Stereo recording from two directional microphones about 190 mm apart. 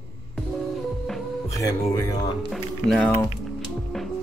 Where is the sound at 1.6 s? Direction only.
15° left (ahead or behind).